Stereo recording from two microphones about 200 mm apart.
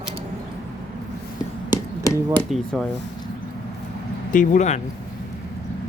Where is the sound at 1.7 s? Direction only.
15° left (ahead or behind).